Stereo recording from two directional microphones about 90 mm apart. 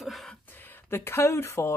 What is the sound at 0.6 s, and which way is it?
Speech, 25° left (ahead or behind).